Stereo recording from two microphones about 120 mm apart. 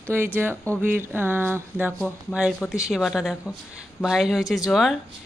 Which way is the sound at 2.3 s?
15° left (ahead or behind).